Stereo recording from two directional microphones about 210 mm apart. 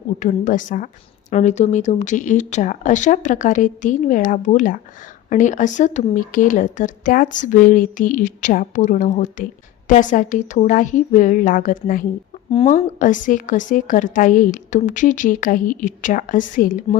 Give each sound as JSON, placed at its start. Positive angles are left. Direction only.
{"t": 0.2, "sound": "a woman's voice", "side_deg": 35}
{"t": 12.5, "sound": "a woman's voice", "side_deg": 30}